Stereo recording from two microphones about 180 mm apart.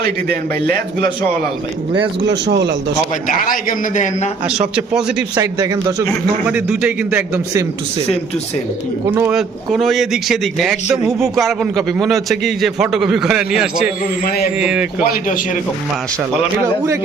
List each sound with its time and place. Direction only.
0.0 s a man's voice: 60° right (ahead or behind)
2.2 s speech: 70° right (ahead or behind)
3.2 s a man's voice: 50° left (ahead or behind)
4.9 s a man's voice: 5° right (ahead or behind)
5.4 s speech: 20° right (ahead or behind)
6.5 s a man's voice: 10° right (ahead or behind)
9.3 s a man's voice: centre (ahead or behind)
14.3 s a man's voice: 60° left (ahead or behind)
14.6 s a man's voice: 5° right (ahead or behind)